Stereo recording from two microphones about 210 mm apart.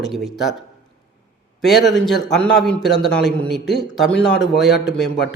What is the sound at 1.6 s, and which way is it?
A man's voice, centre (ahead or behind).